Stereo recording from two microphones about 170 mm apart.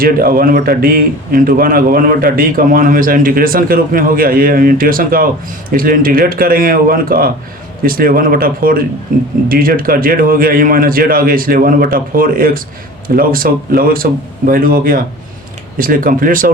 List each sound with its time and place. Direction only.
0.0 s a man's voice: 60° right (ahead or behind)